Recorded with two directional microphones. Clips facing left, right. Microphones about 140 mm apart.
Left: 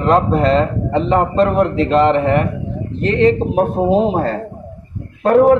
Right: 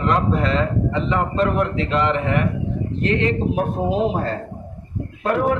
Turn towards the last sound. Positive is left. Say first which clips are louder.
# left 9 dB
turn(degrees=40)  # may be behind; listen again after turning